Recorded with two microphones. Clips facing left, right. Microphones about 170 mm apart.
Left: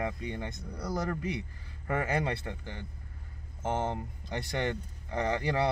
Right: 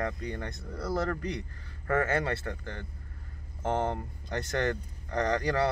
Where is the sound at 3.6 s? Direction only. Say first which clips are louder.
Right 2 dB; 5° left (ahead or behind).